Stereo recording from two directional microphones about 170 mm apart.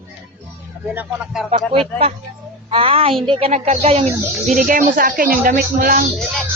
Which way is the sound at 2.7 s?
35° right (ahead or behind).